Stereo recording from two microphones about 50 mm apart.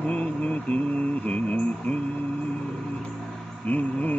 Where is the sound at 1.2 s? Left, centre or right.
Left.